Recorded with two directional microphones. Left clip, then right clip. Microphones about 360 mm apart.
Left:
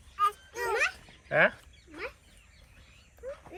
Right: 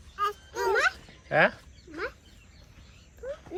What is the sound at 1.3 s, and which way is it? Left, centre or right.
Speech, centre.